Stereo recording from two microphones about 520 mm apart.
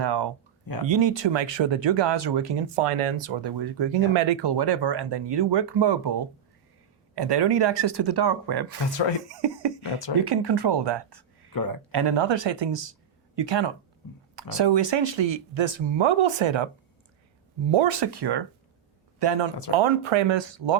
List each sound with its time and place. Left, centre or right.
0.0 s a sound: right
0.9 s speech: right
3.6 s speech: right
9.2 s speech: right
11.5 s speech: left
11.9 s speech: right
19.7 s speech: right